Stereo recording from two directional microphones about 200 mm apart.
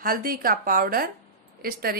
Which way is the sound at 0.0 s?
45° right (ahead or behind).